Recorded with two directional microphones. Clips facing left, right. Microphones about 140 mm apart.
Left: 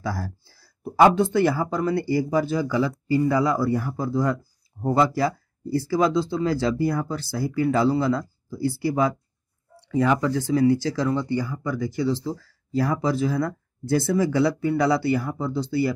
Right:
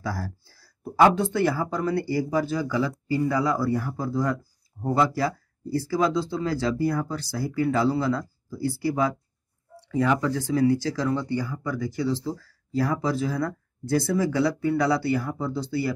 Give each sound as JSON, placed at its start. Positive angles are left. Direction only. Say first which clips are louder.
{"t": 0.0, "sound": "speech", "louder": "left 2 dB", "side_deg": 25}